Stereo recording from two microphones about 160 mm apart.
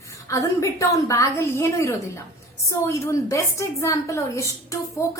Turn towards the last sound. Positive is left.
turn(degrees=20)  # may be behind; listen again after turning